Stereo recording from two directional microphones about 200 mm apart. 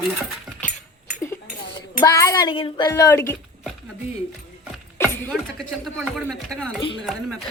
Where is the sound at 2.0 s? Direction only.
15° left (ahead or behind).